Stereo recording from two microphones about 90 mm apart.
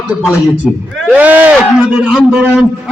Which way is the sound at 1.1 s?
20° right (ahead or behind).